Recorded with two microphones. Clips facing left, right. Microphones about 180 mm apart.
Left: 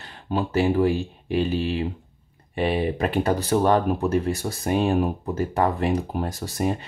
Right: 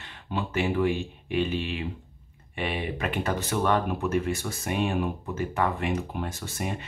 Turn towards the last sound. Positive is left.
turn(degrees=35)  # may be behind; listen again after turning